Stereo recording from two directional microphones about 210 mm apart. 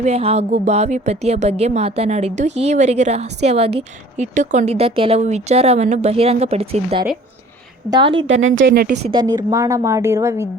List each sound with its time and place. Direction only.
0.0 s a woman's voice: 30° right (ahead or behind)
8.3 s speech: 65° right (ahead or behind)
8.7 s a woman's voice: 45° right (ahead or behind)
9.0 s a woman's voice: 20° right (ahead or behind)